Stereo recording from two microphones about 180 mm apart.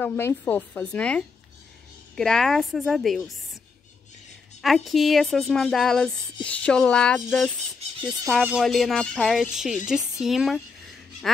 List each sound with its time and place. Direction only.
0.0 s speech: 10° left (ahead or behind)
4.6 s speech: centre (ahead or behind)